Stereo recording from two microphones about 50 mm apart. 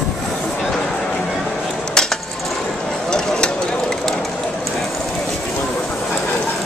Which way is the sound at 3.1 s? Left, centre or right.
Centre.